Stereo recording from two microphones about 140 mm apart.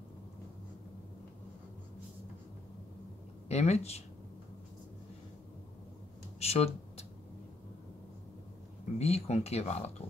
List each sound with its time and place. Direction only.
3.4 s speech: 50° left (ahead or behind)
6.4 s a sound: 50° left (ahead or behind)
8.9 s speech: 50° left (ahead or behind)